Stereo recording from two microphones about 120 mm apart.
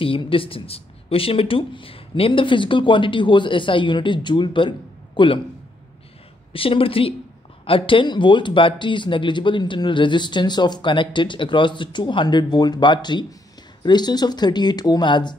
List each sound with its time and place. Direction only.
0.0 s speech: 50° left (ahead or behind)
6.5 s speech: 50° left (ahead or behind)